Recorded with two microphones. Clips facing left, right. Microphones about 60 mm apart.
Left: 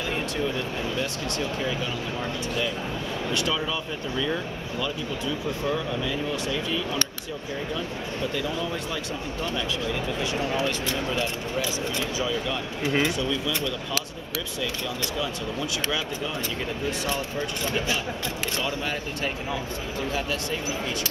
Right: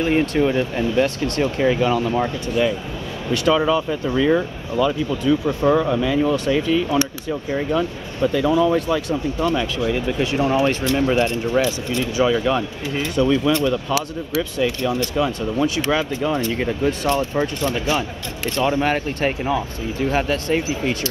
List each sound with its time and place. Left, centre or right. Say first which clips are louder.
0.0 s speech: right 10 dB; right
0.4 s speech: right 9 dB; right
1.6 s speech: right 11 dB; right
13.1 s speech: right 10 dB; right
13.6 s speech: right 9 dB; right
17.7 s speech: right 5 dB; right
18.6 s speech: right 14 dB; right